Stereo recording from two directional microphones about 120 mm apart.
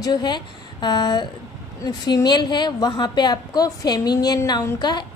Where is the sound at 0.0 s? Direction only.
35° left (ahead or behind).